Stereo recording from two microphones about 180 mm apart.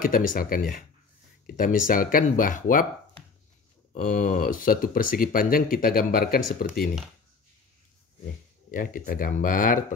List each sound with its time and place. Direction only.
0.0 s speech: 50° left (ahead or behind)
3.9 s speech: 40° left (ahead or behind)
8.7 s speech: 50° left (ahead or behind)